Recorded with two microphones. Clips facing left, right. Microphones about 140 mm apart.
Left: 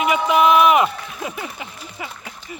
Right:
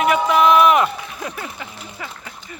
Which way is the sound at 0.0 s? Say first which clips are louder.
Right 1 dB; 5° left (ahead or behind).